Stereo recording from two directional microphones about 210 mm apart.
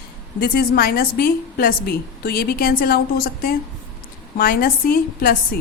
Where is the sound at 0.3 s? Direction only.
45° left (ahead or behind).